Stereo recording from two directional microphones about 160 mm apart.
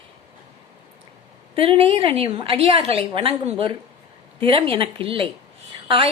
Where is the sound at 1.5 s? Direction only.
35° right (ahead or behind).